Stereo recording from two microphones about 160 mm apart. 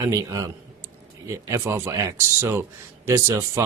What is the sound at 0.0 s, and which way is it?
A man's voice, 20° right (ahead or behind).